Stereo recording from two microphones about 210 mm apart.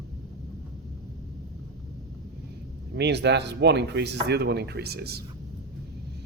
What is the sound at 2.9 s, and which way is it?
Speech, 55° right (ahead or behind).